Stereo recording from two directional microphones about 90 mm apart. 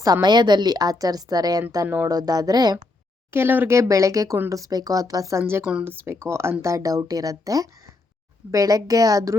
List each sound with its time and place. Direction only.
0.0 s a woman's voice: 50° right (ahead or behind)
3.3 s speech: 25° right (ahead or behind); by 5.4 s 40° right (ahead or behind)
5.4 s a woman's voice: 25° right (ahead or behind)